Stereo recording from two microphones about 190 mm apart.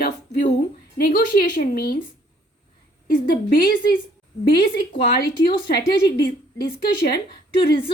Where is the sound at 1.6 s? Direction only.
55° left (ahead or behind).